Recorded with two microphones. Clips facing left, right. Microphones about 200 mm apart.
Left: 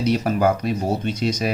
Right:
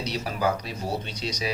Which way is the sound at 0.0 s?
50° left (ahead or behind).